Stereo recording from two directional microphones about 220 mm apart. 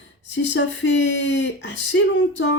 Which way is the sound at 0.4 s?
55° left (ahead or behind).